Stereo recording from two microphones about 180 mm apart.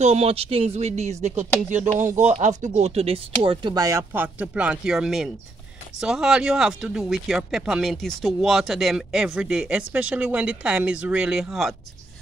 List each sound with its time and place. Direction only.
0.0 s speech: 35° right (ahead or behind); by 11.7 s centre (ahead or behind)